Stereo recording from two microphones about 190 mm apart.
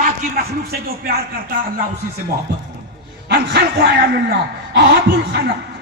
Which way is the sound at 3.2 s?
60° right (ahead or behind).